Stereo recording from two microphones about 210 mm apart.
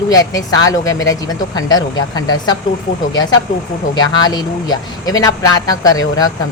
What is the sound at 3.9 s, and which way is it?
Speech, 20° left (ahead or behind).